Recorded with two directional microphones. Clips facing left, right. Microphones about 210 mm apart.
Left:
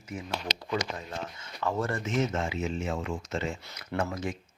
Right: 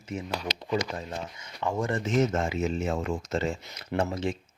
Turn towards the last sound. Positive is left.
turn(degrees=-25)  # may be behind; listen again after turning